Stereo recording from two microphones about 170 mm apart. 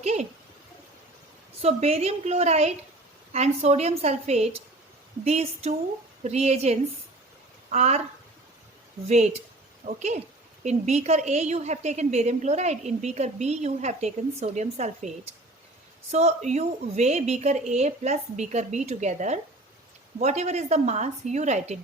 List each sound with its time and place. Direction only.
0.0 s a sound: 40° right (ahead or behind)
1.6 s a woman's voice: 40° right (ahead or behind)
9.0 s a woman's voice: 40° right (ahead or behind)